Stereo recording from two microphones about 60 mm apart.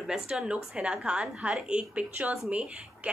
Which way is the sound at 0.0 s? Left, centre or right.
Centre.